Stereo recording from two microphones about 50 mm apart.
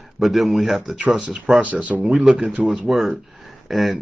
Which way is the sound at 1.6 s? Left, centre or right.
Right.